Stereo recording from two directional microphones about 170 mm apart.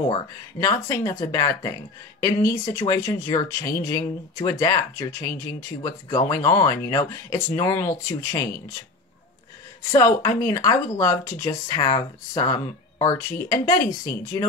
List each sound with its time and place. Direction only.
0.0 s speech: 25° left (ahead or behind)
9.9 s speech: 15° left (ahead or behind)